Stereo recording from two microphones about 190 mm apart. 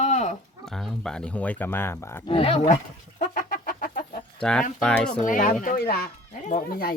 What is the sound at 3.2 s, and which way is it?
Chicken, 45° left (ahead or behind).